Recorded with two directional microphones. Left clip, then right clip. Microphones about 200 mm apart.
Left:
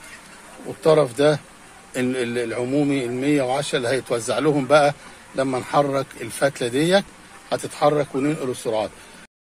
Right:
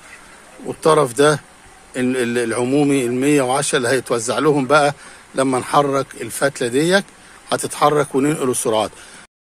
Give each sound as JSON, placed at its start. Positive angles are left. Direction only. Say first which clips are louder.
{"t": 0.8, "sound": "a man's voice", "louder": "right 3 dB", "side_deg": -30}